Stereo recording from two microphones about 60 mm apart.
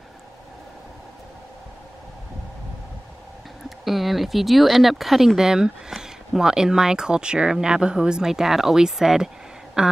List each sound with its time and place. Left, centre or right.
3.6 s speech: centre